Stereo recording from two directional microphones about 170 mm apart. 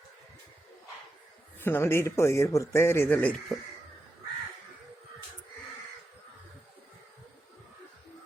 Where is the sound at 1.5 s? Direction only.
15° left (ahead or behind).